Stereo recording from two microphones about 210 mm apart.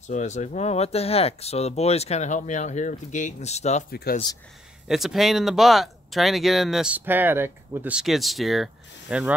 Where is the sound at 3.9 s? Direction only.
45° left (ahead or behind).